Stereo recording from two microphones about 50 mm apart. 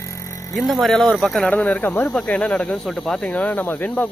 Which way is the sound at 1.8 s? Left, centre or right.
Left.